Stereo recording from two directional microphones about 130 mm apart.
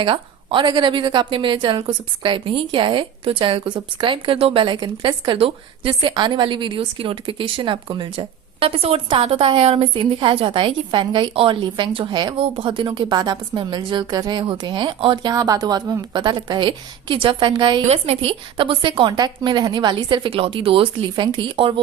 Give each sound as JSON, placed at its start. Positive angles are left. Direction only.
{"t": 0.0, "sound": "a woman's voice", "side_deg": -40}
{"t": 17.8, "sound": "a woman's voice", "side_deg": -50}